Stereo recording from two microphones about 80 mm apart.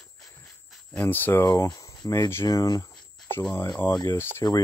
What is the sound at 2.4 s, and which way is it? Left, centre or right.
Speech, left.